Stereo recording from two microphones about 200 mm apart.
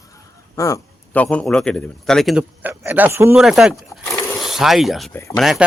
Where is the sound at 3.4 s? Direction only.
Centre (ahead or behind).